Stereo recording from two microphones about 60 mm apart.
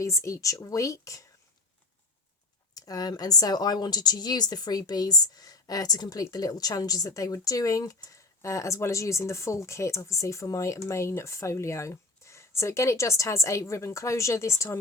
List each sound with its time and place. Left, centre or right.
0.0 s speech: left
2.7 s speech: left